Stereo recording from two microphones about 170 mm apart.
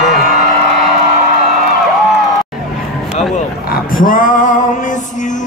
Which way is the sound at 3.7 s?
55° left (ahead or behind).